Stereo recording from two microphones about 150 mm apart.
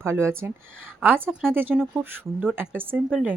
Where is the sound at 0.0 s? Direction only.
15° right (ahead or behind).